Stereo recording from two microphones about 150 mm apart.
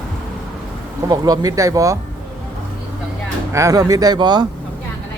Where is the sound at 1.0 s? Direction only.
25° right (ahead or behind).